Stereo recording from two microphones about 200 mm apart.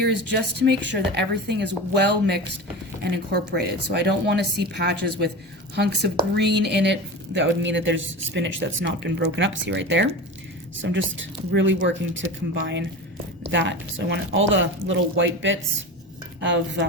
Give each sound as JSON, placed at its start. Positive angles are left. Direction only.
{"t": 0.6, "sound": "speech", "side_deg": -55}